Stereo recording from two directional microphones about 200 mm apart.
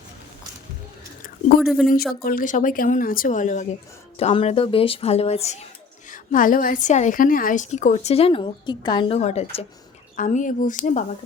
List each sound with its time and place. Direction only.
1.6 s speech: centre (ahead or behind)
2.2 s a woman's voice: 45° left (ahead or behind)